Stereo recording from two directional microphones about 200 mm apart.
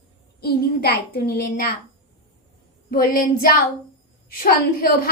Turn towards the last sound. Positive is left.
turn(degrees=45)  # may be behind; listen again after turning